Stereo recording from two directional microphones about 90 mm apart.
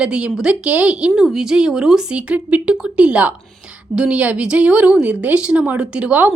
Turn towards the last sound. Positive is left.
turn(degrees=-15)  # may be behind; listen again after turning